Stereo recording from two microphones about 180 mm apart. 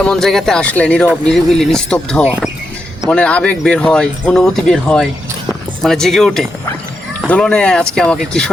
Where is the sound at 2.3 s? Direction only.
5° right (ahead or behind).